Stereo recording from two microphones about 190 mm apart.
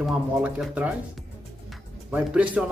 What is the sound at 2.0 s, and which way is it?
Speech, 5° right (ahead or behind).